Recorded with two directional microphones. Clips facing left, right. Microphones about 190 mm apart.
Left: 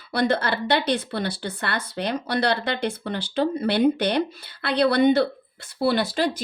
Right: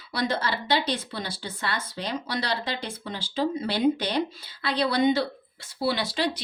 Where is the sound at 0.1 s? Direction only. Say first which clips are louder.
Left 5 dB; 60° left (ahead or behind).